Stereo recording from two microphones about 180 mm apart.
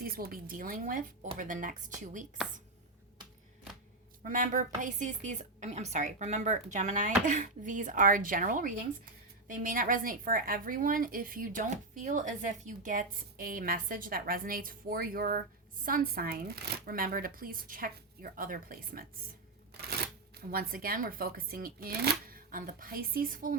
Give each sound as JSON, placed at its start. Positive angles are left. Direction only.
{"t": 0.0, "sound": "a woman's voice", "side_deg": -55}
{"t": 4.2, "sound": "a woman's voice", "side_deg": -50}
{"t": 20.5, "sound": "a woman's voice", "side_deg": -55}